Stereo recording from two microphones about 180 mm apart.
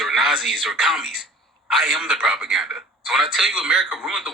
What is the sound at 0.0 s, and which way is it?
Speech, centre (ahead or behind).